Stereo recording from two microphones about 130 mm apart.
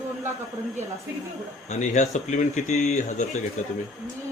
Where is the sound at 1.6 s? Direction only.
65° left (ahead or behind).